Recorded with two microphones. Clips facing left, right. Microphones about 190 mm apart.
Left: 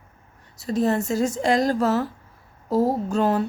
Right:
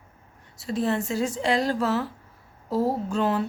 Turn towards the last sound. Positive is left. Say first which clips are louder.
# left 3 dB
turn(degrees=45)  # may be behind; listen again after turning